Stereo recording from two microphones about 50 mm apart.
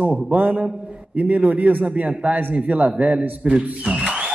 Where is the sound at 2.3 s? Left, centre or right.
Right.